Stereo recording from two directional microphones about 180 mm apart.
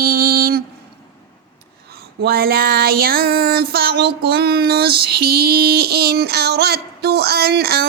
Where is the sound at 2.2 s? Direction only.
55° right (ahead or behind).